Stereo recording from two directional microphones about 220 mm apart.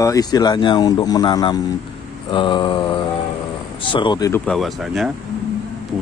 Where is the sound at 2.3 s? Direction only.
20° left (ahead or behind).